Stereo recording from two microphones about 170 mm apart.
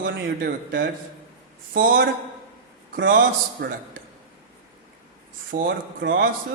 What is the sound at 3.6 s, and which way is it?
Speech, 70° right (ahead or behind).